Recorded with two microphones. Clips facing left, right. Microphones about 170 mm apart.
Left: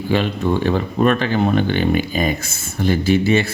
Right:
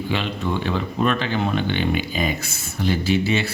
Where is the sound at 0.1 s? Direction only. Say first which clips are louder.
Left 8 dB; 45° left (ahead or behind).